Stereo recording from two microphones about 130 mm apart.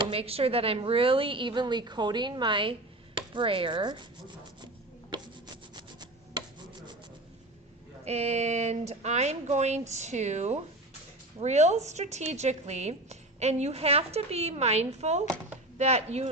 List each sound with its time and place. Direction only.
0.1 s a woman's voice: 50° right (ahead or behind)
5.7 s rub: 35° right (ahead or behind)
8.0 s speech: 55° right (ahead or behind)